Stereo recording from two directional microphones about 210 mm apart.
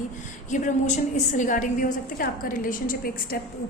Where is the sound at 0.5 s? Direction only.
35° left (ahead or behind).